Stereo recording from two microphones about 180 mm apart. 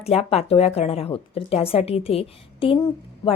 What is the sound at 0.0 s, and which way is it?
A woman's voice, 35° left (ahead or behind).